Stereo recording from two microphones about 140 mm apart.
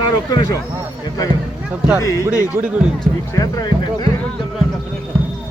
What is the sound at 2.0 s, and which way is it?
Speech, 25° left (ahead or behind).